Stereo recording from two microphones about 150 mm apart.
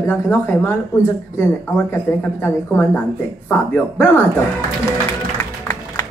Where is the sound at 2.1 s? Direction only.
15° left (ahead or behind).